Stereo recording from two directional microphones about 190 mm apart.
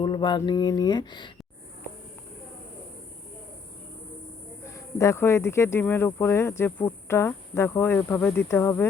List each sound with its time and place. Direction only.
0.0 s speech: 25° left (ahead or behind)
4.7 s speech: 15° left (ahead or behind)